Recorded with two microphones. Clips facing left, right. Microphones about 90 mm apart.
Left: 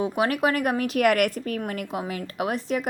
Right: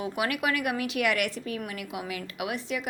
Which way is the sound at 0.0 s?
35° left (ahead or behind).